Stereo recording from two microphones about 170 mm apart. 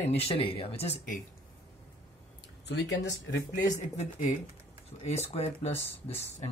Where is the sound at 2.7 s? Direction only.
90° left.